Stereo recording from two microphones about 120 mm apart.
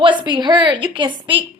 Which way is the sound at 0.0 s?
40° right (ahead or behind).